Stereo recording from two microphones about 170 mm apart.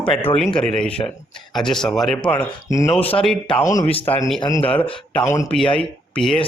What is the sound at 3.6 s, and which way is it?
Speech, 20° left (ahead or behind).